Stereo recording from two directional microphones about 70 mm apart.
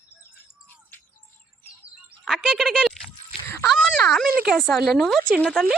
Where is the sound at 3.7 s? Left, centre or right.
Centre.